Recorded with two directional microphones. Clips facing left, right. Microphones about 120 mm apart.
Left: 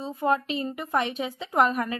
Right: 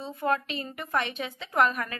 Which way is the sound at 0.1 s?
20° left (ahead or behind).